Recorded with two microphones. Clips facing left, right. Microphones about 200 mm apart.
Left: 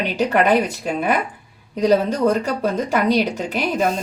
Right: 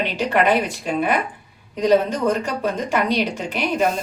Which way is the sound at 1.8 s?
35° left (ahead or behind).